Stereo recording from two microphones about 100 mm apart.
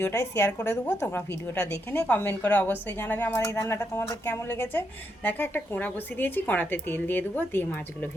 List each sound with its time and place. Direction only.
0.0 s a woman's voice: 25° left (ahead or behind)